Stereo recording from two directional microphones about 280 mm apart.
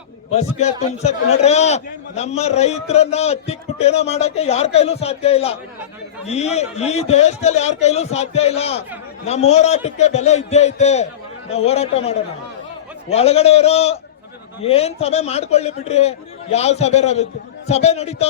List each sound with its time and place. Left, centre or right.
0.3 s a man's voice: left